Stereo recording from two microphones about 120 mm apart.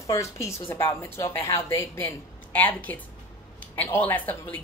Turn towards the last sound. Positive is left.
turn(degrees=15)  # may be behind; listen again after turning